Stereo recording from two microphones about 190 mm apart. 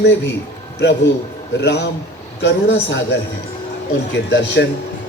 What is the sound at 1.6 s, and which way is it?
A man's voice, 65° left (ahead or behind).